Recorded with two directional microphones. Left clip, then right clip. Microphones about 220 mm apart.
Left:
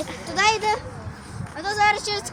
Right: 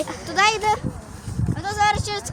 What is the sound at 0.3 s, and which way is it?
A child's voice, 50° right (ahead or behind).